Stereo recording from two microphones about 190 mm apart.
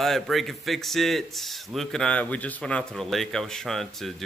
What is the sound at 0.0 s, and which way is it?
Speech, centre (ahead or behind).